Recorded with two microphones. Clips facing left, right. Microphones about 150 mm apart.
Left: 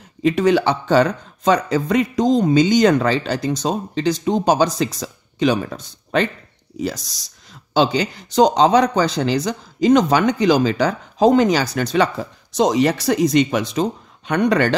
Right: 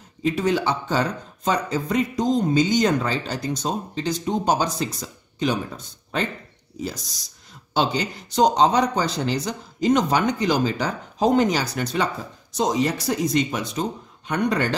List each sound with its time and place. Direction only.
0.2 s speech: 75° left (ahead or behind)